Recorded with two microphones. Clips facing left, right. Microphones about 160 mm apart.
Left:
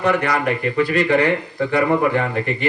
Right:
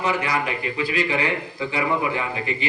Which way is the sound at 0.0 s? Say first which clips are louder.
Left 5 dB; 60° left (ahead or behind).